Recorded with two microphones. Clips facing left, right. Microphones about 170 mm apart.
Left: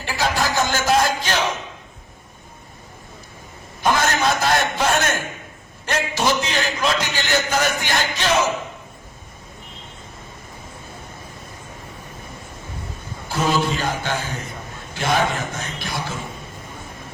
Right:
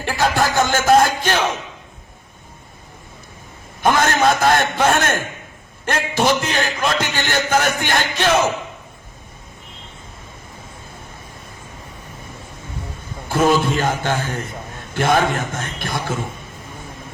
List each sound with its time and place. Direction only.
0.0 s music: 50° right (ahead or behind)
3.8 s a sound: 55° right (ahead or behind)
5.8 s a man's voice: 55° right (ahead or behind)
13.2 s a man's voice: 50° right (ahead or behind)